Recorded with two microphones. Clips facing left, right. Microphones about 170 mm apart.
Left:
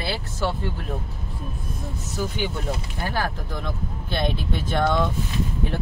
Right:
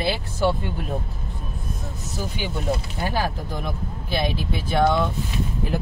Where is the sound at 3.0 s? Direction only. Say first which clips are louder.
Right 2 dB; 15° right (ahead or behind).